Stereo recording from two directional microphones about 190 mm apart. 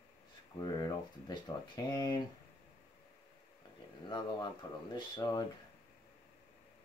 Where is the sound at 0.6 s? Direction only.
20° left (ahead or behind).